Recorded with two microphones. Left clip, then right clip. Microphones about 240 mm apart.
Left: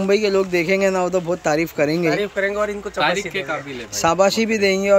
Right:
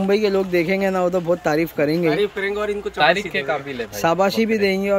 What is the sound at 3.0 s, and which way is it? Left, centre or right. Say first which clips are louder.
Speech: right 3 dB; centre.